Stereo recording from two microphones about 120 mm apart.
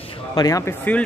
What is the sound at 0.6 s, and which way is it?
Speech, 15° left (ahead or behind).